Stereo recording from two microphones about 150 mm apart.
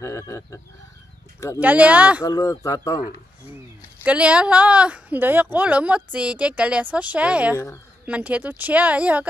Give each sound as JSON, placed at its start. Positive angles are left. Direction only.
{"t": 0.0, "sound": "speech", "side_deg": 20}
{"t": 1.6, "sound": "a woman's voice", "side_deg": -10}
{"t": 2.2, "sound": "speech", "side_deg": 25}
{"t": 4.0, "sound": "a woman's voice", "side_deg": -10}
{"t": 7.5, "sound": "speech", "side_deg": 20}
{"t": 8.0, "sound": "a woman's voice", "side_deg": -10}